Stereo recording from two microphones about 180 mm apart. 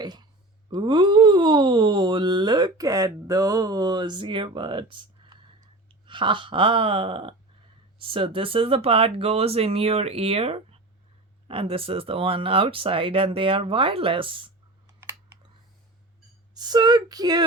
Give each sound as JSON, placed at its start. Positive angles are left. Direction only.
{"t": 0.0, "sound": "a sound", "side_deg": -25}
{"t": 0.7, "sound": "speech", "side_deg": -25}
{"t": 16.6, "sound": "speech", "side_deg": -25}